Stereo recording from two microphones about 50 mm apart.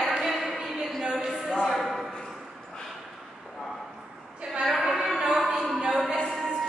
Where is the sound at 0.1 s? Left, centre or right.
Centre.